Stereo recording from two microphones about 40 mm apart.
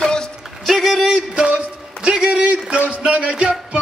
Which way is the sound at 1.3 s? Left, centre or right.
Right.